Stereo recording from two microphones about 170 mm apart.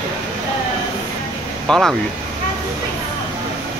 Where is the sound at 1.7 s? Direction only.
Centre (ahead or behind).